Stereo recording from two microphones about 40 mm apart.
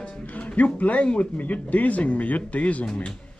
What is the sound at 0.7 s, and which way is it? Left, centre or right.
Speech, left.